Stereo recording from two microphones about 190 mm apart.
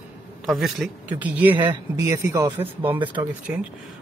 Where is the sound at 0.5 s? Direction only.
Centre (ahead or behind).